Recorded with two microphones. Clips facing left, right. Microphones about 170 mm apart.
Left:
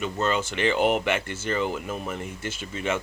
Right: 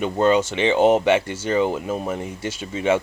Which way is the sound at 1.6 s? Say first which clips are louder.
Right 6 dB; 45° right (ahead or behind).